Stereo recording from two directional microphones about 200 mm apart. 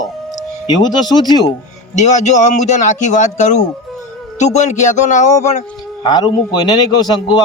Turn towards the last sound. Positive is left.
turn(degrees=20)  # may be behind; listen again after turning